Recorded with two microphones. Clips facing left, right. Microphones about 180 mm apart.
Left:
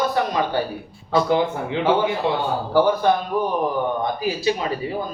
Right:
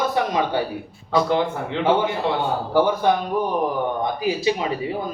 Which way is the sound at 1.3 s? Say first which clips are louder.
Left 1 dB; 5° left (ahead or behind).